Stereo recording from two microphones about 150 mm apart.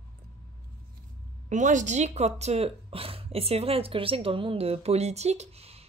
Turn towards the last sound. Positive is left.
turn(degrees=-40)  # may be behind; listen again after turning